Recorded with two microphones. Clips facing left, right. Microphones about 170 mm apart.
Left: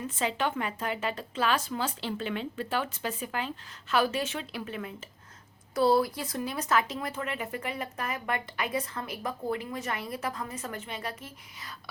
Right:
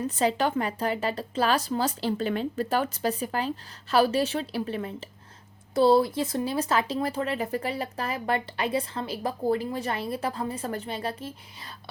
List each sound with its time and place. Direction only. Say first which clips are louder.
0.0 s speech: right 5 dB; 40° right (ahead or behind)